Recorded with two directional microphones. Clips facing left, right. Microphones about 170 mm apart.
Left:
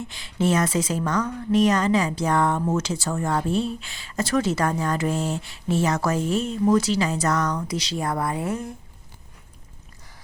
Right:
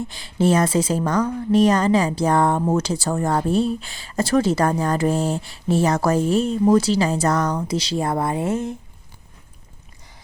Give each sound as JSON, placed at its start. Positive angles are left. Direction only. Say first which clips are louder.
{"t": 0.0, "sound": "speech", "louder": "right 4 dB", "side_deg": -35}